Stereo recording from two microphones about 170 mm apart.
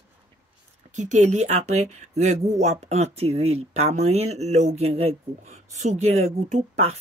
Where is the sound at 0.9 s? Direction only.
45° right (ahead or behind).